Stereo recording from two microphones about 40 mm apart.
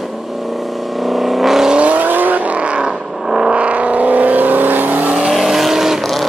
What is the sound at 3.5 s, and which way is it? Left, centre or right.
Vehicle, right.